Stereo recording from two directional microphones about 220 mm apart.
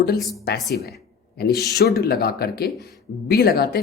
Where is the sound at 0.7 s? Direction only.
45° left (ahead or behind).